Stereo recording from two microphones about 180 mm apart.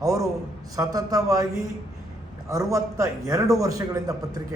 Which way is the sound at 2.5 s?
20° right (ahead or behind).